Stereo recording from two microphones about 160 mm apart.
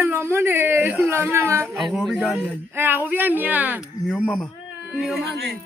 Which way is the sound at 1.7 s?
5° right (ahead or behind).